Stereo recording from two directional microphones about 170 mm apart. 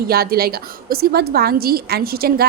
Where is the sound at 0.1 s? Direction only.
65° right (ahead or behind).